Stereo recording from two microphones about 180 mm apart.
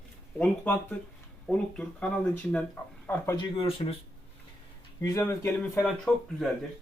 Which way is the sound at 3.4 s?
30° left (ahead or behind).